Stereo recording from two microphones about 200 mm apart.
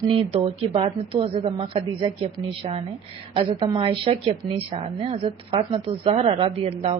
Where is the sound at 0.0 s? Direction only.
25° right (ahead or behind).